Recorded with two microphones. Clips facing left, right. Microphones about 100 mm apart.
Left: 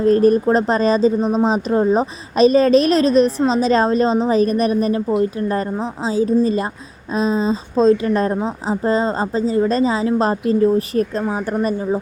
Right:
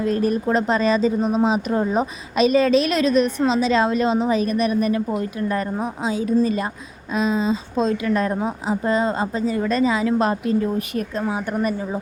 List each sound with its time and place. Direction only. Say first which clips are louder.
0.0 s a woman's voice: left 7 dB; 40° left (ahead or behind)
11.5 s speech: left 4 dB; 25° left (ahead or behind)